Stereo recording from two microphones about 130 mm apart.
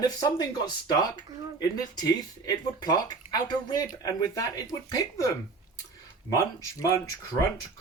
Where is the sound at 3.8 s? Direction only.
30° left (ahead or behind).